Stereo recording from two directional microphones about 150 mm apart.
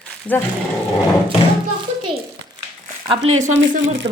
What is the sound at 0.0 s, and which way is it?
Roar, 10° left (ahead or behind).